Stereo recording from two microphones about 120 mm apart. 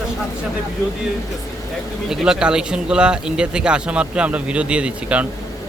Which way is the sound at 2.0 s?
5° right (ahead or behind).